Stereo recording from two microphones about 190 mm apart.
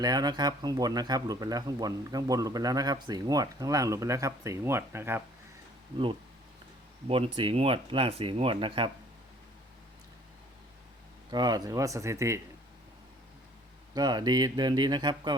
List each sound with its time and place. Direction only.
0.0 s speech: 20° right (ahead or behind)
7.1 s speech: 30° right (ahead or behind)
11.3 s speech: 20° right (ahead or behind)
13.9 s speech: 20° right (ahead or behind)